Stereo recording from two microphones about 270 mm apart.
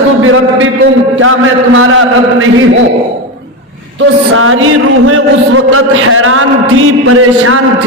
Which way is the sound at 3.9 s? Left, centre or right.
Right.